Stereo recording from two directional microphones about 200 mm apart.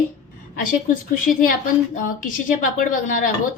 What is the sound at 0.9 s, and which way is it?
A woman's voice, 40° left (ahead or behind).